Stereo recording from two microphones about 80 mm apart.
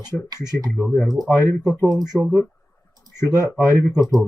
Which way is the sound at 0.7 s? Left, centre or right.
Left.